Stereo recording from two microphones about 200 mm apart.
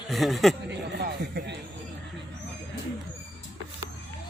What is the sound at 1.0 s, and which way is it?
Speech, 55° right (ahead or behind).